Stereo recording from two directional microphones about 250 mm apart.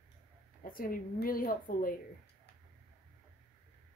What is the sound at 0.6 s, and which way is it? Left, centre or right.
Speech, left.